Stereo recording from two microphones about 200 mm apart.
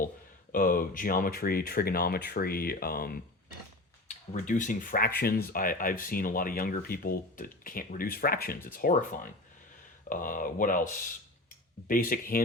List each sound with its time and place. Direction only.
0.5 s speech: 45° left (ahead or behind)